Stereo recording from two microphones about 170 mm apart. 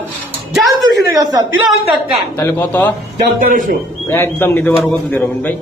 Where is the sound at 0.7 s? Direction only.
25° right (ahead or behind).